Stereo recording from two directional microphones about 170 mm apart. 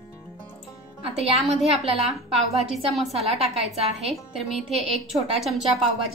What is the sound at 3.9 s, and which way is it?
A woman's voice, centre (ahead or behind).